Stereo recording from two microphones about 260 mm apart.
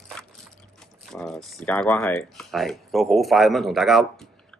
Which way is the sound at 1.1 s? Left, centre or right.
Centre.